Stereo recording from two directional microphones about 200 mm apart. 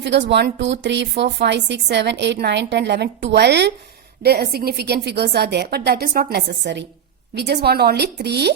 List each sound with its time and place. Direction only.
0.0 s a woman's voice: 60° right (ahead or behind)